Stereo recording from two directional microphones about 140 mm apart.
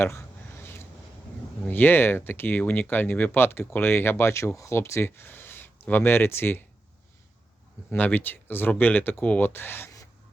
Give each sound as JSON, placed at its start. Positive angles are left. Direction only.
{"t": 0.6, "sound": "a sound", "side_deg": 15}
{"t": 1.6, "sound": "speech", "side_deg": 15}
{"t": 7.9, "sound": "speech", "side_deg": 15}